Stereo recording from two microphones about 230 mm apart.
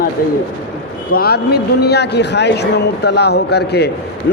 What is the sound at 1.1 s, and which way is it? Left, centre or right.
A man's voice, left.